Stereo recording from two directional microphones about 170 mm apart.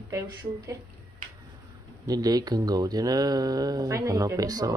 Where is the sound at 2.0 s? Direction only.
20° right (ahead or behind).